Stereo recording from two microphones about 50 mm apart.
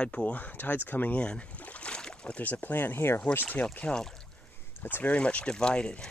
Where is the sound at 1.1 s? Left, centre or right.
Centre.